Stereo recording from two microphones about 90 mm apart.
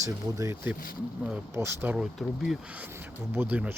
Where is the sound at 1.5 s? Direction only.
30° right (ahead or behind).